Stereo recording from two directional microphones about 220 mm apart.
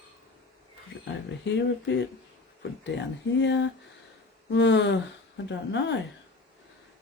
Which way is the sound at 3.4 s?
55° left (ahead or behind).